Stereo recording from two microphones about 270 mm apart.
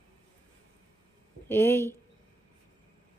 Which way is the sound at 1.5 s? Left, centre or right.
Centre.